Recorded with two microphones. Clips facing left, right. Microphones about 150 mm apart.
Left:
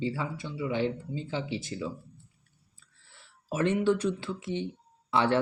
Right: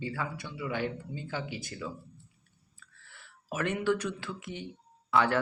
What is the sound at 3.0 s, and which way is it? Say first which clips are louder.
Speech: left 3 dB; 30° left (ahead or behind).